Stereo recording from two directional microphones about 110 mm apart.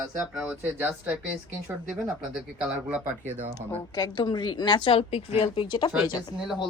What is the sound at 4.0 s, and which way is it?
A woman's voice, 40° left (ahead or behind).